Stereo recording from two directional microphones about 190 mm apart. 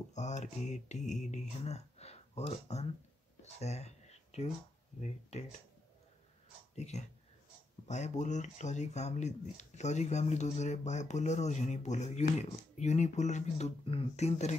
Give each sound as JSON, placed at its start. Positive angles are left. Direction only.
{"t": 0.1, "sound": "speech", "side_deg": 40}
{"t": 6.7, "sound": "speech", "side_deg": 35}